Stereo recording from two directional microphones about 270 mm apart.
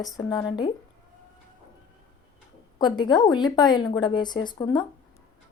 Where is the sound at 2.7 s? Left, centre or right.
Centre.